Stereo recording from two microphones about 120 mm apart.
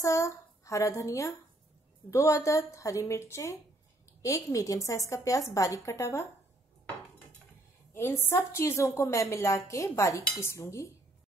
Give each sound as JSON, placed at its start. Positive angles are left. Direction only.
{"t": 0.0, "sound": "a child's voice", "side_deg": 25}
{"t": 7.9, "sound": "a woman's voice", "side_deg": 20}